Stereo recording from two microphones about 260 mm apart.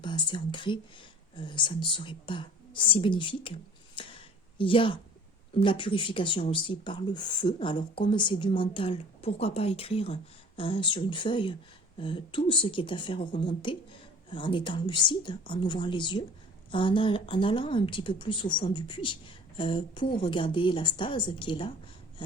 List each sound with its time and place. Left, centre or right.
0.0 s a woman's voice: centre
4.0 s a sound: centre
4.5 s a woman's voice: centre